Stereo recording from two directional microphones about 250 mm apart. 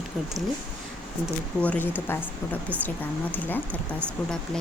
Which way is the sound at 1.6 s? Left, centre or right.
Centre.